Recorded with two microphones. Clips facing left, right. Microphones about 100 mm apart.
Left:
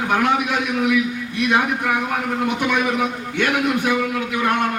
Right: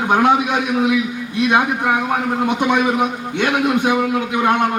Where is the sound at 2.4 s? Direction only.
20° right (ahead or behind).